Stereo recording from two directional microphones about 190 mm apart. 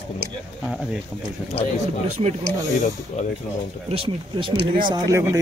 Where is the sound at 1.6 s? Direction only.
30° left (ahead or behind).